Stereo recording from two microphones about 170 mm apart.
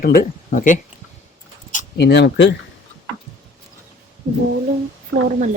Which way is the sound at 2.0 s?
85° left.